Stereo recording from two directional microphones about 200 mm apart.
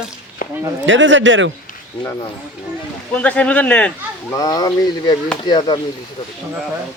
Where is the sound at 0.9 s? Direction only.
70° right (ahead or behind).